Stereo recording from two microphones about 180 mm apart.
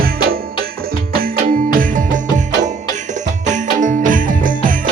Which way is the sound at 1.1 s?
50° right (ahead or behind).